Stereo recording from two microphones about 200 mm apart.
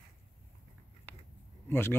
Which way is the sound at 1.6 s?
10° left (ahead or behind).